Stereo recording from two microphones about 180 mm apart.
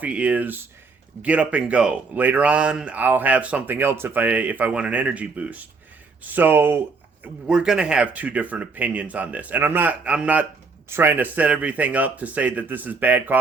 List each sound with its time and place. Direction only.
0.0 s speech: 5° right (ahead or behind)